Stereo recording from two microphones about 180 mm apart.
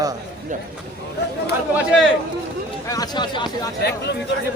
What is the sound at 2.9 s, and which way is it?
Speech, 25° left (ahead or behind).